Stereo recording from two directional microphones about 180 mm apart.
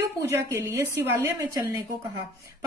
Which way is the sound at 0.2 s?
15° right (ahead or behind).